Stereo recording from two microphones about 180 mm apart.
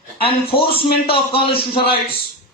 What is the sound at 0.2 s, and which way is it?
A man's voice, 30° left (ahead or behind).